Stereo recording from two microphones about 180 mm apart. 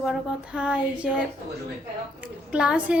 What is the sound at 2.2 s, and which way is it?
Speech, 5° right (ahead or behind).